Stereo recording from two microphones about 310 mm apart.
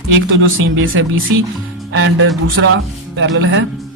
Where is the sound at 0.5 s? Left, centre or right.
Right.